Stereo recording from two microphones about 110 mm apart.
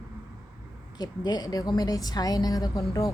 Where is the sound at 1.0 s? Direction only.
40° left (ahead or behind).